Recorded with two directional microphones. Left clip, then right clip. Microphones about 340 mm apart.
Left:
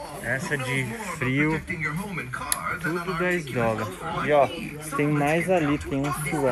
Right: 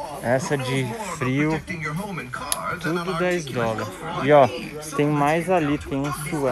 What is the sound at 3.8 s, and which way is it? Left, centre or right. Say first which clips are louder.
Speech: right 2 dB; right.